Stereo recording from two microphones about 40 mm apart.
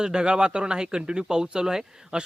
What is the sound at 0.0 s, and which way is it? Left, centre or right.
Speech, centre.